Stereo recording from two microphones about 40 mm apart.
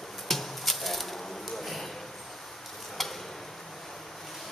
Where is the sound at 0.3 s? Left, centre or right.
Centre.